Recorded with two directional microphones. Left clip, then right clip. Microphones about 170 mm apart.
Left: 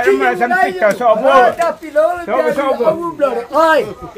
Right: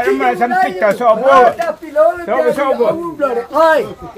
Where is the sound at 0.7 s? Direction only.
30° right (ahead or behind).